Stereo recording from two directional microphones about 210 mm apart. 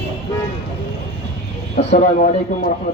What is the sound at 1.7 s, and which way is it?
Speech, 35° left (ahead or behind).